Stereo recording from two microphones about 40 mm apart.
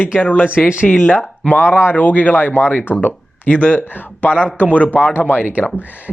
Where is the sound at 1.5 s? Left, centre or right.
Left.